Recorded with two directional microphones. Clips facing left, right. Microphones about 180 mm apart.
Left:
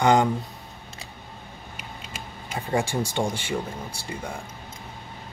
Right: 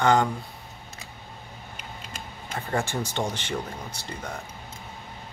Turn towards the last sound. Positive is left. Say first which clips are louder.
# left 2 dB
turn(degrees=10)  # may be behind; listen again after turning